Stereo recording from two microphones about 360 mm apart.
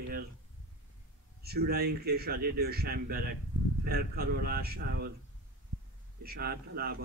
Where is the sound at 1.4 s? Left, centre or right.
Right.